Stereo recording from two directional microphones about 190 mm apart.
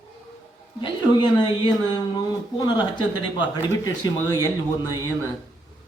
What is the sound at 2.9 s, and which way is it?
Speech, 25° left (ahead or behind).